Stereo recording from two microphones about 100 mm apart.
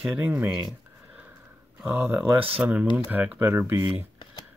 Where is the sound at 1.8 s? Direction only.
20° right (ahead or behind).